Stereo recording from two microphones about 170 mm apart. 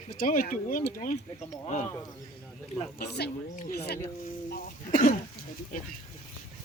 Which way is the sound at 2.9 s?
75° left (ahead or behind).